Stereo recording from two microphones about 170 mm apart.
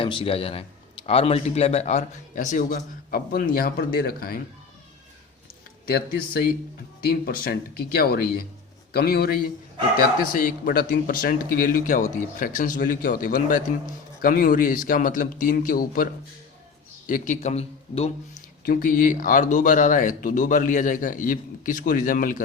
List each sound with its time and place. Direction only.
0.0 s speech: 30° left (ahead or behind); by 4.4 s 60° left (ahead or behind)
5.8 s speech: 65° left (ahead or behind)
17.1 s speech: 50° left (ahead or behind)
18.6 s speech: 55° left (ahead or behind)